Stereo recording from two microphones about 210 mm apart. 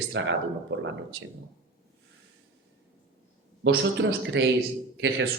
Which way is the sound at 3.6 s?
55° right (ahead or behind).